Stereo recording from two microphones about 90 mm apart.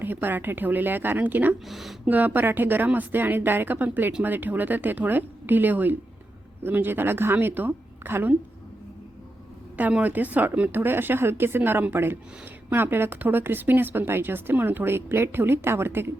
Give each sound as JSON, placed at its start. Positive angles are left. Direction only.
{"t": 0.0, "sound": "speech", "side_deg": -20}
{"t": 1.6, "sound": "speech", "side_deg": 0}
{"t": 2.0, "sound": "speech", "side_deg": -20}
{"t": 9.7, "sound": "speech", "side_deg": -20}